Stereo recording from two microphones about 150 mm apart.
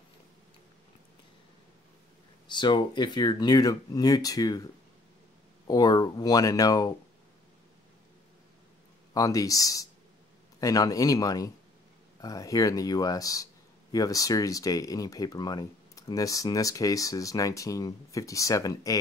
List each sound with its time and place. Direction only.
2.5 s speech: 30° left (ahead or behind)
5.7 s speech: 25° left (ahead or behind)
9.1 s speech: 25° left (ahead or behind)